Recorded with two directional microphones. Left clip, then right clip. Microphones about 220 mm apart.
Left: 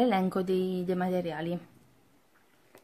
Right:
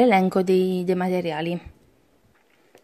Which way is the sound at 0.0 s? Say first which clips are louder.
Right 9 dB; 30° right (ahead or behind).